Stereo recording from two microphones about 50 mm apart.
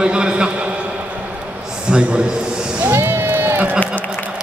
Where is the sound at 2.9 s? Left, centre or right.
Right.